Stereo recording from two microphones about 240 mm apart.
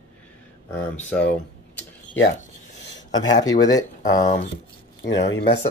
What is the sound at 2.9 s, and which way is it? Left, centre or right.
Speech, centre.